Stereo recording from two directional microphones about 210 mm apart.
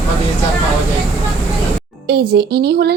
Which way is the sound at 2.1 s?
50° right (ahead or behind).